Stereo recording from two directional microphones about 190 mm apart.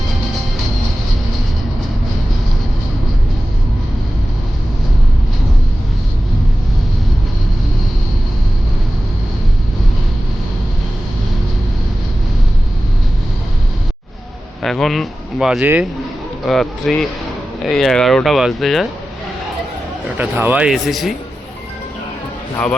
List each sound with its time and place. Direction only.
14.6 s speech: centre (ahead or behind)
20.1 s speech: 10° right (ahead or behind)